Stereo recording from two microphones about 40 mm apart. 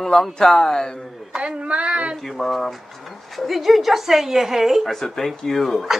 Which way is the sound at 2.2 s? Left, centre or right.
Centre.